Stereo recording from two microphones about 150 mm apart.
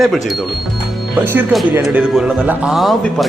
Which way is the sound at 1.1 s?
10° right (ahead or behind).